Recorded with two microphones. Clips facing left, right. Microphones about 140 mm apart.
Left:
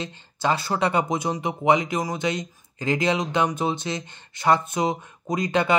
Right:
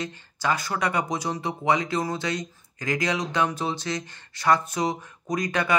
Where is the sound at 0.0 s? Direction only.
25° left (ahead or behind).